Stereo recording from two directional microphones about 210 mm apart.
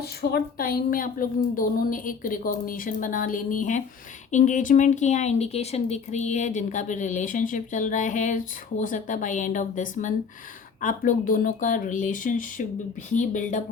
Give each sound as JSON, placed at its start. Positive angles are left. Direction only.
{"t": 0.0, "sound": "speech", "side_deg": 50}